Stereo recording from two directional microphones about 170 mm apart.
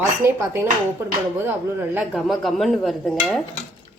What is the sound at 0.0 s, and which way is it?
Speech, 15° right (ahead or behind).